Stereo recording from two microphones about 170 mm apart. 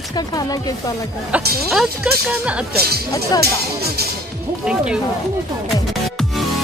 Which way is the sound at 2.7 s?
65° right (ahead or behind).